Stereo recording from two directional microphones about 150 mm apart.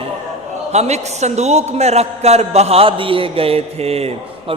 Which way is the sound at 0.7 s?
45° right (ahead or behind).